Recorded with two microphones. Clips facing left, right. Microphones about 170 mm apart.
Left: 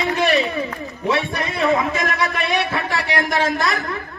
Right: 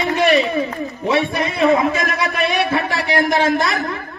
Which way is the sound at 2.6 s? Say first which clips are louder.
Right 4 dB; 20° right (ahead or behind).